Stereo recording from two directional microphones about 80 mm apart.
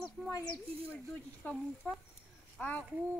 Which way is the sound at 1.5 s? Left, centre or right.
Centre.